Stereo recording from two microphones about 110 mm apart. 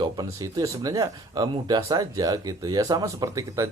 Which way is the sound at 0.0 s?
40° right (ahead or behind).